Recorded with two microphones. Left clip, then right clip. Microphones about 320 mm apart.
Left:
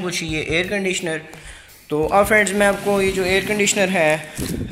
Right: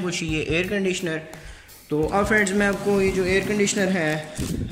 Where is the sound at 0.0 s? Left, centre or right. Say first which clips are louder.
Left 2 dB; centre.